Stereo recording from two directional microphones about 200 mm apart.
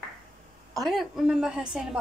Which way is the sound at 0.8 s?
Centre (ahead or behind).